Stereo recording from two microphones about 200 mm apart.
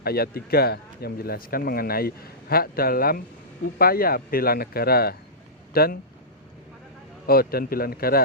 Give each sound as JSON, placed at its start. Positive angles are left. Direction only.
{"t": 0.0, "sound": "speech", "side_deg": 50}
{"t": 7.3, "sound": "speech", "side_deg": 50}